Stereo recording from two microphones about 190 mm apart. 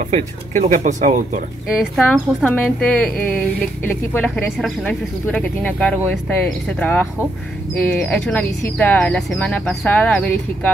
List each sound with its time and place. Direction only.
0.1 s speech: 40° right (ahead or behind)
2.0 s speech: 5° left (ahead or behind)